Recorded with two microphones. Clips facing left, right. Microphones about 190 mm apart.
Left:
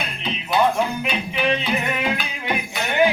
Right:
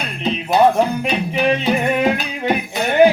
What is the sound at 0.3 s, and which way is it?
Music, 40° right (ahead or behind).